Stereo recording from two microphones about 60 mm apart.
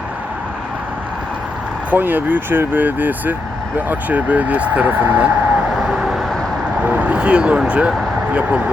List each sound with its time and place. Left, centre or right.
1.9 s speech: right
5.7 s vehicle: centre
6.8 s speech: right